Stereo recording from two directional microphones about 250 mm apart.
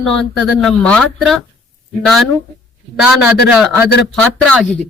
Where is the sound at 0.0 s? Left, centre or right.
Centre.